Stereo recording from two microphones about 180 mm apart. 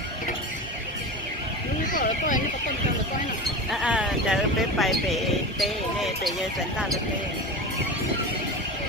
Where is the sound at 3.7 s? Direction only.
5° right (ahead or behind).